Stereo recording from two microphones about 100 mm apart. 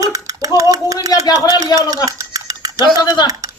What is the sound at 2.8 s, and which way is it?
Speech, 45° left (ahead or behind).